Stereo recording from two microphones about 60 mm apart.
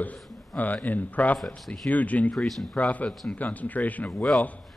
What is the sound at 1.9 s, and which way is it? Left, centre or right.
Speech, left.